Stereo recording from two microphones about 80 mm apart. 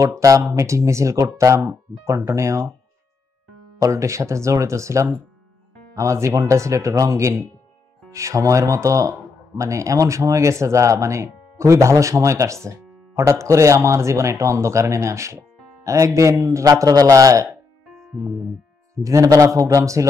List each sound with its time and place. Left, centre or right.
0.0 s speech: right
3.8 s speech: right
19.0 s speech: right